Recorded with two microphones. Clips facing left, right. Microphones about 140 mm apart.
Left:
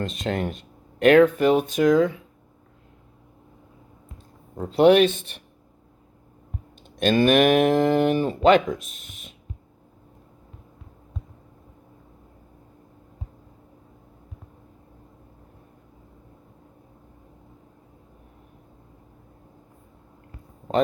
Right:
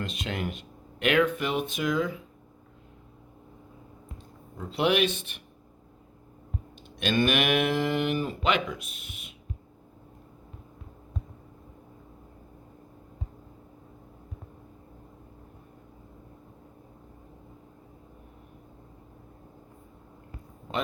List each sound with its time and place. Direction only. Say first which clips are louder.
0.2 s speech: left 6 dB; 40° left (ahead or behind)
4.5 s speech: left 10 dB; 40° left (ahead or behind)
7.0 s speech: left 8 dB; 40° left (ahead or behind)